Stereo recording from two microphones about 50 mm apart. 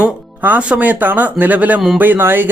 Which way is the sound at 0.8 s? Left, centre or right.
Right.